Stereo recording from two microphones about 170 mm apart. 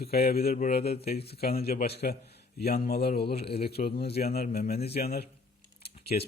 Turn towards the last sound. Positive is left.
turn(degrees=70)  # may be behind; listen again after turning